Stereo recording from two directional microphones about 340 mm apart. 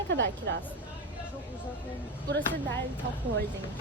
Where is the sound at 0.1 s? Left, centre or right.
Right.